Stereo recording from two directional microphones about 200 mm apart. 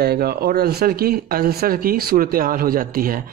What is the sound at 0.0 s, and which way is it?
A man's voice, 50° right (ahead or behind).